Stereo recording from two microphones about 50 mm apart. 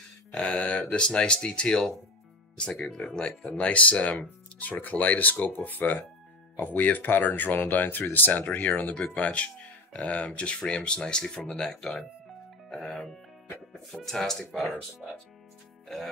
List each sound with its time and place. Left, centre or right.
0.3 s speech: left
3.5 s speech: left
8.8 s speech: left; by 12.1 s centre
14.0 s speech: centre